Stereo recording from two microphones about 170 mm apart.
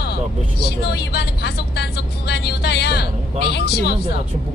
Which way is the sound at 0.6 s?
70° left (ahead or behind).